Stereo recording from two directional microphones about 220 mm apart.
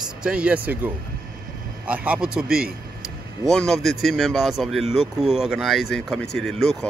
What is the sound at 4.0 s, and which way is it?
Speech, centre (ahead or behind).